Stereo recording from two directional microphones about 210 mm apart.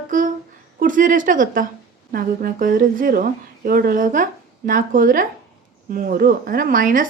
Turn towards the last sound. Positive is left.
turn(degrees=-40)  # may be behind; listen again after turning